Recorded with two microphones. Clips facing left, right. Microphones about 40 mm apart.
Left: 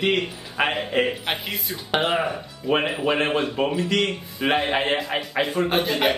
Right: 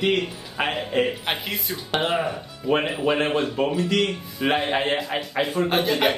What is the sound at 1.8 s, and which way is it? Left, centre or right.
A man's voice, centre.